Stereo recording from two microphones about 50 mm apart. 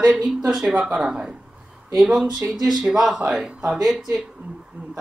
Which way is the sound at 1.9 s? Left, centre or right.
Centre.